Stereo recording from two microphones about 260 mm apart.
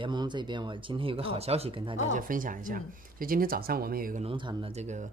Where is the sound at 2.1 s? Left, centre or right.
Right.